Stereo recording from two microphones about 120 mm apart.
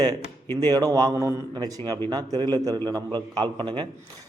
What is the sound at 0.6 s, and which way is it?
A man's voice, 30° right (ahead or behind).